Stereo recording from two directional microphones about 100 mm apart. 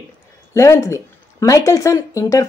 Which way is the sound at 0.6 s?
30° left (ahead or behind).